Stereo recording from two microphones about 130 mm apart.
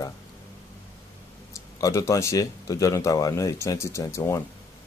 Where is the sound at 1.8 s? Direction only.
25° left (ahead or behind).